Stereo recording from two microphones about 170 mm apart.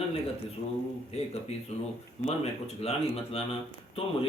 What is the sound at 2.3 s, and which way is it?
Speech, 35° left (ahead or behind).